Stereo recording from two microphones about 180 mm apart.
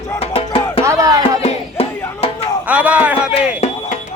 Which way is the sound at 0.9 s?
20° right (ahead or behind).